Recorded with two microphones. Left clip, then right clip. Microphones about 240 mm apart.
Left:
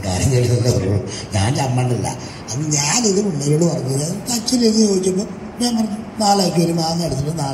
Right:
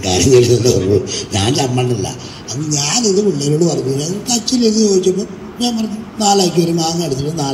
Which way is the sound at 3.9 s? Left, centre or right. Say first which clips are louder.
Right 5 dB; right.